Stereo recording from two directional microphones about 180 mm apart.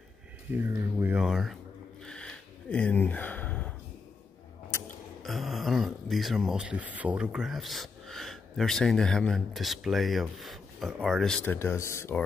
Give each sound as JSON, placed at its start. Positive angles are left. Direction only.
{"t": 0.5, "sound": "speech", "side_deg": -15}
{"t": 2.0, "sound": "a sound", "side_deg": 5}
{"t": 5.2, "sound": "speech", "side_deg": 0}